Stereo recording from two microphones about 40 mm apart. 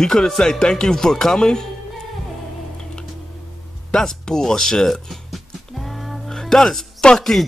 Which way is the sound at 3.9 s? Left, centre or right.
Centre.